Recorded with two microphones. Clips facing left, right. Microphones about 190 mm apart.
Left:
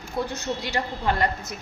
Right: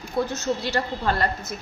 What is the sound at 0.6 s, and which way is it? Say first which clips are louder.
Speech: right 2 dB; 15° left (ahead or behind).